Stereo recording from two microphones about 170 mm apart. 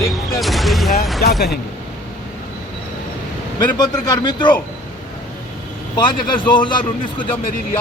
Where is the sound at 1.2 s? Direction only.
65° left (ahead or behind).